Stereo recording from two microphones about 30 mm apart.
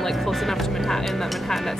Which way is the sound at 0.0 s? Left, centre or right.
Centre.